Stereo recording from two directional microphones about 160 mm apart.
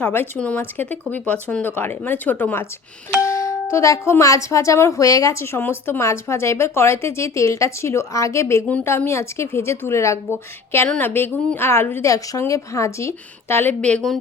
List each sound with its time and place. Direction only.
0.0 s speech: 15° left (ahead or behind)